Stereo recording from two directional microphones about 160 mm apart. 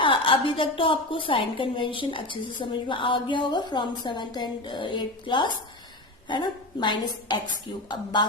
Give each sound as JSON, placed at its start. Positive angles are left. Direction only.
{"t": 0.0, "sound": "a woman's voice", "side_deg": 35}